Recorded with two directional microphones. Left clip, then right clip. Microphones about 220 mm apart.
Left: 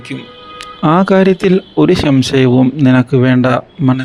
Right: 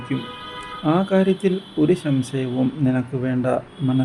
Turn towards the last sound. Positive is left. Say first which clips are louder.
# left 8 dB
turn(degrees=40)  # may be behind; listen again after turning